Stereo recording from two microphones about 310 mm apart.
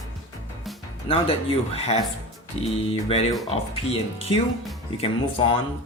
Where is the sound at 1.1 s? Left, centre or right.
Centre.